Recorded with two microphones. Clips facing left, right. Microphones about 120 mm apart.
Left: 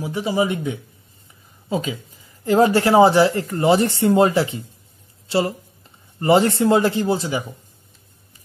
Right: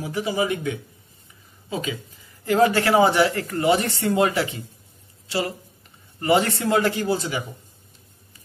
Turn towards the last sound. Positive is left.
turn(degrees=25)  # may be behind; listen again after turning